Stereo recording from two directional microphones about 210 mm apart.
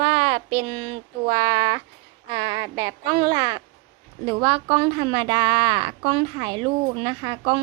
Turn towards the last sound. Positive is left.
turn(degrees=-25)  # may be behind; listen again after turning